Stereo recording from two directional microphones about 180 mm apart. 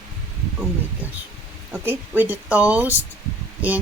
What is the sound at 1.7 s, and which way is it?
Speech, 10° right (ahead or behind).